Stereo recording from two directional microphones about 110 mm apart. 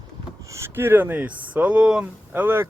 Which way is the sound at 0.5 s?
20° right (ahead or behind).